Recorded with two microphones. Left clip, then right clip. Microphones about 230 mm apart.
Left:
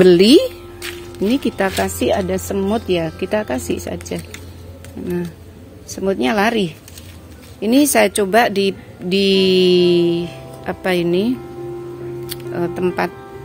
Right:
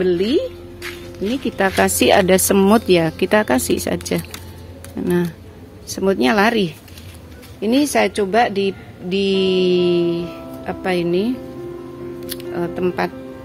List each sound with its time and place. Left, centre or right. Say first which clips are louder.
0.0 s speech: left 8 dB; left
1.8 s speech: right 4 dB; centre
5.0 s speech: right 4 dB; centre
7.6 s speech: left 3 dB; centre
12.5 s speech: left 2 dB; centre